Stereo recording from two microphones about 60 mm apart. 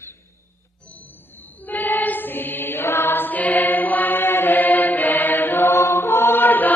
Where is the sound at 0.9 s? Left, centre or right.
Left.